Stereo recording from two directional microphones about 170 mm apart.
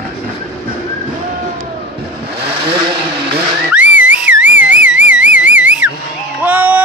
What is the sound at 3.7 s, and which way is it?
Whistling, 10° right (ahead or behind).